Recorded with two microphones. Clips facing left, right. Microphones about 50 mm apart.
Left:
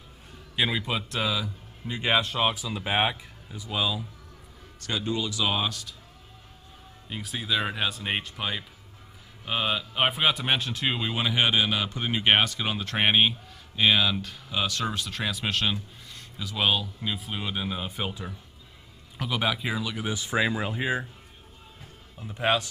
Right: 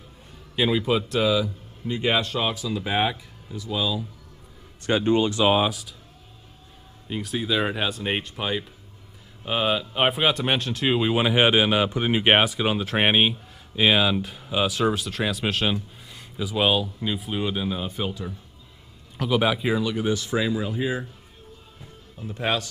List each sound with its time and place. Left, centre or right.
0.6 s a man's voice: centre
2.2 s speech: centre
4.7 s speech: right
5.5 s speech: centre
7.1 s a man's voice: centre
11.0 s speech: centre
19.1 s a man's voice: centre
20.2 s speech: centre
22.2 s speech: centre